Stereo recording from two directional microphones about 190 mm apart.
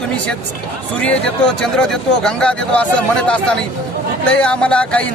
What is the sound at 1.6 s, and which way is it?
A man's voice, 5° left (ahead or behind).